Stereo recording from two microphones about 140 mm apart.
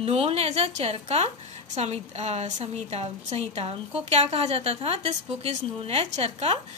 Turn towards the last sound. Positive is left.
turn(degrees=-50)  # may be behind; listen again after turning